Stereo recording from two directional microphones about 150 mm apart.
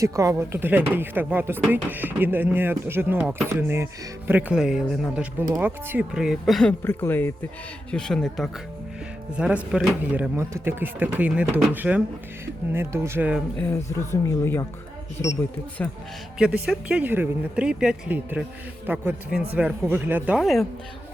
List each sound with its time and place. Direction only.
0.0 s speech: 20° right (ahead or behind); by 6.7 s 5° left (ahead or behind)
6.8 s speech: 15° left (ahead or behind)
7.9 s speech: 5° left (ahead or behind)
9.4 s speech: 10° right (ahead or behind)
14.1 s speech: 15° left (ahead or behind)
15.8 s speech: 10° left (ahead or behind)
16.4 s speech: 5° right (ahead or behind)